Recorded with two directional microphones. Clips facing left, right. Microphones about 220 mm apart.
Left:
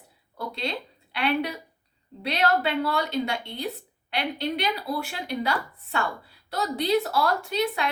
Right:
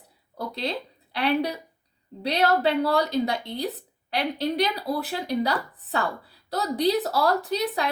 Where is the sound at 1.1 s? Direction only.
35° right (ahead or behind).